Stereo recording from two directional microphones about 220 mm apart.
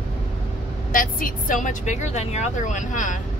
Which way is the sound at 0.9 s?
40° left (ahead or behind).